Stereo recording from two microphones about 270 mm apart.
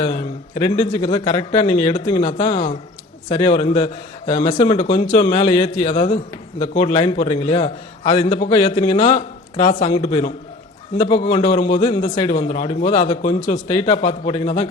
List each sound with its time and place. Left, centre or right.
0.0 s a man's voice: left